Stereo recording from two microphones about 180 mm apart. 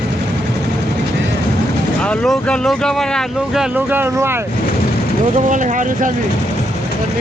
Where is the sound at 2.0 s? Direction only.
5° left (ahead or behind); by 4.4 s 10° right (ahead or behind).